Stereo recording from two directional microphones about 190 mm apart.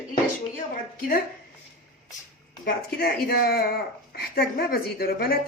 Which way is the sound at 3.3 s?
55° left (ahead or behind).